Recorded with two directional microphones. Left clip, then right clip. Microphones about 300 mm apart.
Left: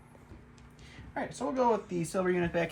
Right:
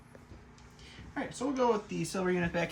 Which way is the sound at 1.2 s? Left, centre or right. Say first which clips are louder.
Left 1 dB; centre.